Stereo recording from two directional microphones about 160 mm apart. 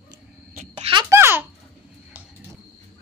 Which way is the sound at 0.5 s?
55° right (ahead or behind).